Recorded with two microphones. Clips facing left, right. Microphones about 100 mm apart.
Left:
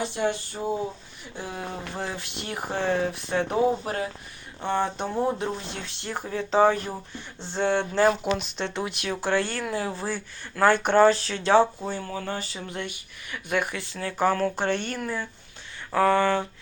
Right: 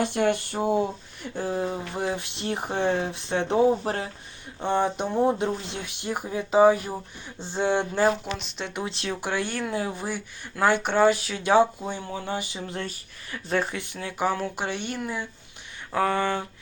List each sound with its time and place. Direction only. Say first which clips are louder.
0.0 s speech: right 3 dB; 60° right (ahead or behind)
1.4 s speech: right 7 dB; 35° right (ahead or behind)
1.9 s speech: right 4 dB; 20° right (ahead or behind)
4.6 s speech: right 2 dB; 15° right (ahead or behind)
8.4 s speech: left 4 dB; centre (ahead or behind)
8.7 s speech: right 2 dB; 25° right (ahead or behind)
9.2 s speech: left 4 dB; 15° right (ahead or behind)